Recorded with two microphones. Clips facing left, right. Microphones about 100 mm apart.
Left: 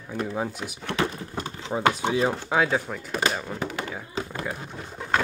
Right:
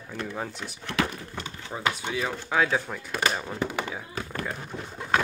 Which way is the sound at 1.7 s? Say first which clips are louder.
Left 6 dB; 25° left (ahead or behind).